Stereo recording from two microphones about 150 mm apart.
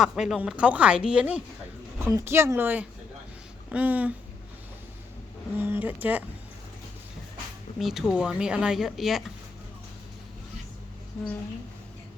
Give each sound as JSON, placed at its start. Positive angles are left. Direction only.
{"t": 0.0, "sound": "speech", "side_deg": 0}
{"t": 5.5, "sound": "speech", "side_deg": -15}
{"t": 7.8, "sound": "speech", "side_deg": 0}